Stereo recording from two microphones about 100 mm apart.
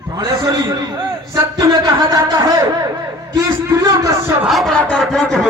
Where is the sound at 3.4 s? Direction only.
35° right (ahead or behind).